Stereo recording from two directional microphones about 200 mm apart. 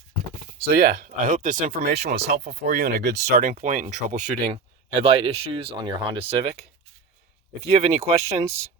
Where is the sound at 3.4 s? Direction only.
40° right (ahead or behind).